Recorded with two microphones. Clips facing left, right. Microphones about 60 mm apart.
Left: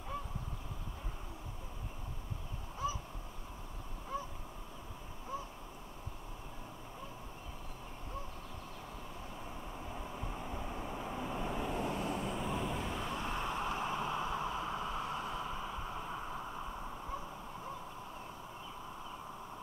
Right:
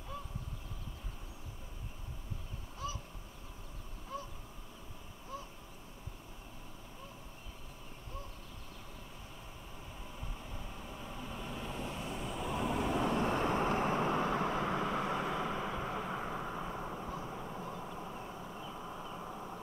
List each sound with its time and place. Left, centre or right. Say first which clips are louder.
2.8 s crow: left 4 dB; left
4.1 s crow: left 3 dB; centre
5.3 s caw: left 3 dB; left
9.9 s vehicle: left 5 dB; left
10.3 s vehicle: left 6 dB; left
12.5 s vehicle: right 3 dB; centre
13.0 s vehicle: right 6 dB; right